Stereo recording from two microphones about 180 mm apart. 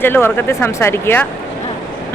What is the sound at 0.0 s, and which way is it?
Speech, 10° left (ahead or behind).